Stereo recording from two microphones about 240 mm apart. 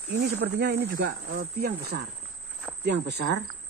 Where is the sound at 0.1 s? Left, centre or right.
Right.